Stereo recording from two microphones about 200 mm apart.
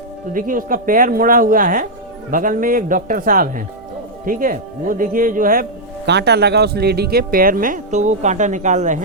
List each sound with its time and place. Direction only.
0.3 s speech: 45° right (ahead or behind)
6.1 s speech: 55° right (ahead or behind); by 9.0 s 35° right (ahead or behind)